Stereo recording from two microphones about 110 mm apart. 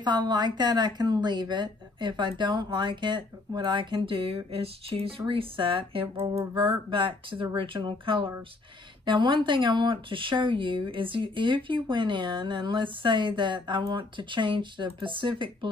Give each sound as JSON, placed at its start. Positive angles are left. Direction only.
{"t": 0.0, "sound": "speech", "side_deg": -40}